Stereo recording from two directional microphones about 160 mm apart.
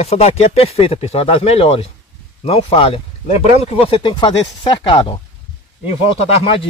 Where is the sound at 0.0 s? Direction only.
40° left (ahead or behind).